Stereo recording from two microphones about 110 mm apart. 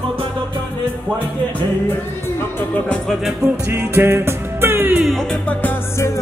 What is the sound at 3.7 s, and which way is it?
Music, 25° right (ahead or behind).